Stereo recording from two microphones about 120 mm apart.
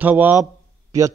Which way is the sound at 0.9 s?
25° right (ahead or behind).